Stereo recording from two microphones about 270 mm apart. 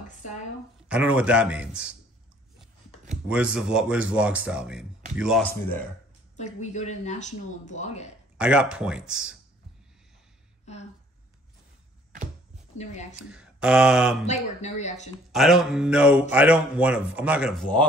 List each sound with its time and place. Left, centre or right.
0.8 s speech: centre
3.3 s speech: centre
6.3 s speech: left
8.4 s speech: centre
10.6 s a sound: left
13.3 s mantra: centre
14.2 s speech: left
15.3 s speech: centre